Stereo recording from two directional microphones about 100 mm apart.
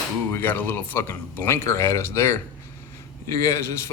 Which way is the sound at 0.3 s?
20° left (ahead or behind).